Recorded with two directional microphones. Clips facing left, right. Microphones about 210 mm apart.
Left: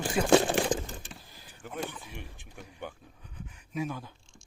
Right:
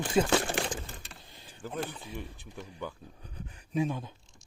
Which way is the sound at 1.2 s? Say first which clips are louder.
Right 4 dB; 25° right (ahead or behind).